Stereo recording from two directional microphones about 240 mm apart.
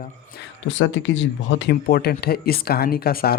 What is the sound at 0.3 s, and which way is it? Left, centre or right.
Speech, left.